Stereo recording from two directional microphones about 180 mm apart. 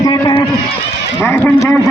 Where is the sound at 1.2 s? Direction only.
10° left (ahead or behind).